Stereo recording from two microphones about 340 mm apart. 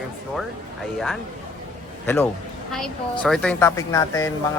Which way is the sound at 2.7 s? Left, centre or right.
Centre.